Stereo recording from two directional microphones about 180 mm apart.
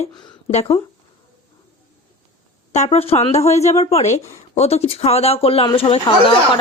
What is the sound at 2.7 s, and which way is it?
A woman's voice, 40° left (ahead or behind).